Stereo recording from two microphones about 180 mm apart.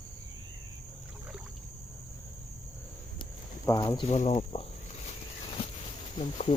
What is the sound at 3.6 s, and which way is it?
Speech, 20° left (ahead or behind).